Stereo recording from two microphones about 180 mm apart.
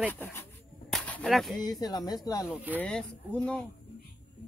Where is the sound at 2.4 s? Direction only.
10° right (ahead or behind).